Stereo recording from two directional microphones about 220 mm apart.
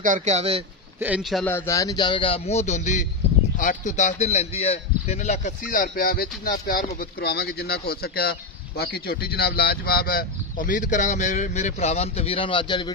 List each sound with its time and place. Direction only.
0.0 s speech: 35° right (ahead or behind)
0.9 s a man's voice: 5° right (ahead or behind)
1.4 s speech: 10° left (ahead or behind)